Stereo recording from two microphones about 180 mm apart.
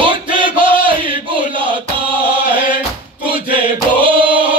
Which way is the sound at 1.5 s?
30° right (ahead or behind).